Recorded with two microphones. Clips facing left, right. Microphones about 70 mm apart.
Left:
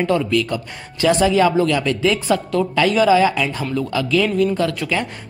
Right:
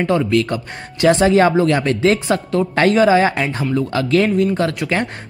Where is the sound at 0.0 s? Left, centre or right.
Right.